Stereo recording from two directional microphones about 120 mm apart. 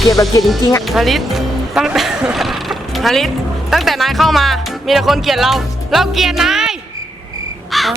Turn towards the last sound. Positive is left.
turn(degrees=0)  # may be behind; listen again after turning